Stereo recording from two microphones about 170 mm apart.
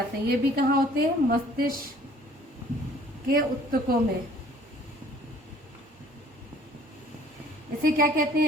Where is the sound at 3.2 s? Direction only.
60° right (ahead or behind).